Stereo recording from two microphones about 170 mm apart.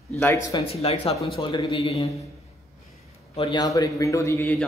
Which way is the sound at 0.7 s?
35° left (ahead or behind).